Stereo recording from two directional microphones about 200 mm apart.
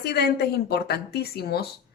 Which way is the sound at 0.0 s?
55° left (ahead or behind).